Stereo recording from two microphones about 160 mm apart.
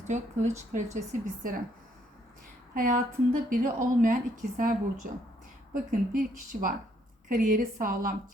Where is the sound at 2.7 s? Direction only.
60° right (ahead or behind).